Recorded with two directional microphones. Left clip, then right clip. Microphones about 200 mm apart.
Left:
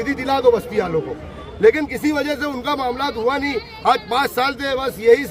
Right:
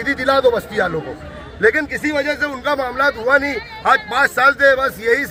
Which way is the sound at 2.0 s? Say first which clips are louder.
Left 1 dB; 15° left (ahead or behind).